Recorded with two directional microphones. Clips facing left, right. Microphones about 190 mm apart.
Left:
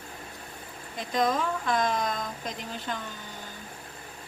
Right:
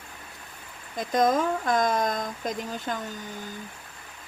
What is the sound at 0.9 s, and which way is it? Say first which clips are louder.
Speech: right 4 dB; 45° right (ahead or behind).